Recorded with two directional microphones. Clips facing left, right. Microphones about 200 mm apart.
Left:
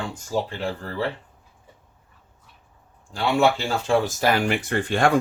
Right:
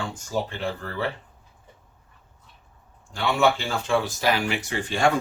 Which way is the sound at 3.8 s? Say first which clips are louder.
Left 3 dB; 45° left (ahead or behind).